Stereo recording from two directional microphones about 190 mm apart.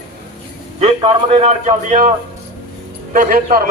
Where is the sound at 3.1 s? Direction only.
45° right (ahead or behind).